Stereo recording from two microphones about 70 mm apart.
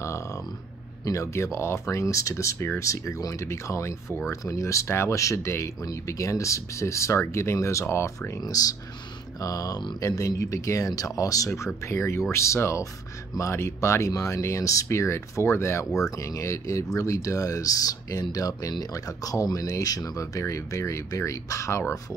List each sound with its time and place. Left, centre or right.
1.0 s speech: left
8.4 s speech: left
16.0 s speech: left